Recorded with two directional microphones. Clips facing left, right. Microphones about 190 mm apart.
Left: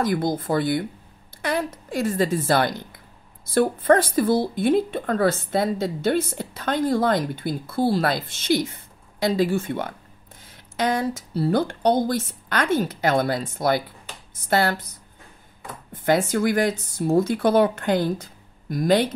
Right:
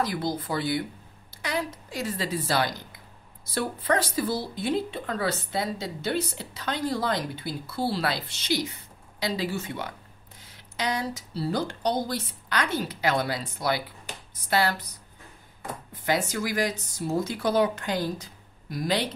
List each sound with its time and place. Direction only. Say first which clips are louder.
0.0 s speech: left 5 dB; 50° left (ahead or behind)
15.9 s speech: left 7 dB; 50° left (ahead or behind)